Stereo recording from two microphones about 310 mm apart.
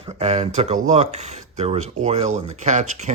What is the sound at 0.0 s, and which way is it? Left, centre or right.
Speech, right.